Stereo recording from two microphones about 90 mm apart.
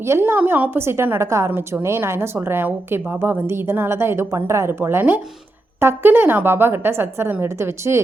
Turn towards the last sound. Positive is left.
turn(degrees=-30)  # may be behind; listen again after turning